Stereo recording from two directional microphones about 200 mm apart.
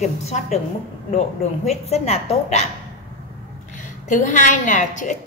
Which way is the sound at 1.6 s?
30° left (ahead or behind).